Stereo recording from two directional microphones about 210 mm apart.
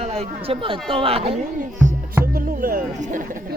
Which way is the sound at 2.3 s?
40° right (ahead or behind).